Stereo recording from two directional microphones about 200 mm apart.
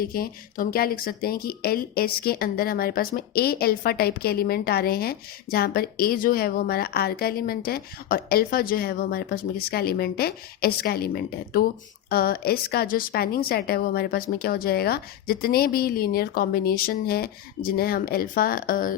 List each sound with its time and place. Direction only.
0.0 s speech: 50° left (ahead or behind)